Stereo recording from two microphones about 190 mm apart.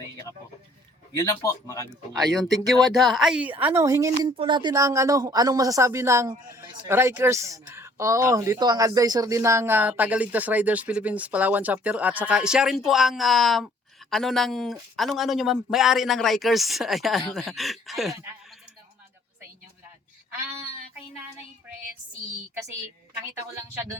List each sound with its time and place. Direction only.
1.1 s speech: 15° left (ahead or behind)
2.9 s a woman's voice: centre (ahead or behind)
23.6 s a woman's voice: 15° right (ahead or behind)